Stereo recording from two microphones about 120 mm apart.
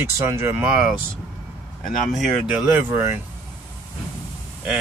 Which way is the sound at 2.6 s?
20° right (ahead or behind).